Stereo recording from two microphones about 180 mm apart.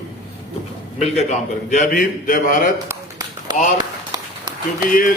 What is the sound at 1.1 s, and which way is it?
A man's voice, 40° left (ahead or behind).